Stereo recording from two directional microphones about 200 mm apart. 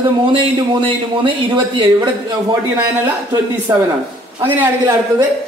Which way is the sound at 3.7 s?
15° right (ahead or behind).